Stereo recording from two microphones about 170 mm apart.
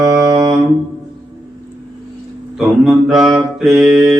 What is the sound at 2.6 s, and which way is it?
Mantra, centre (ahead or behind).